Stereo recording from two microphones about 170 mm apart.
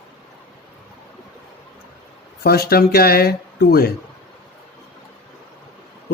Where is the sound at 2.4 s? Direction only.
65° left (ahead or behind).